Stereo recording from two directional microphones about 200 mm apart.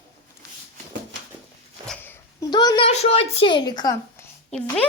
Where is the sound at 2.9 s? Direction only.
30° left (ahead or behind).